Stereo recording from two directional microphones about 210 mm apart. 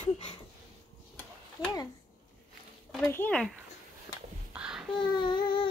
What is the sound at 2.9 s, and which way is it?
Speech, 5° left (ahead or behind).